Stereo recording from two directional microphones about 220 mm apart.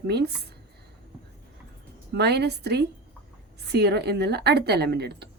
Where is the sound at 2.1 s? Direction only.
50° right (ahead or behind).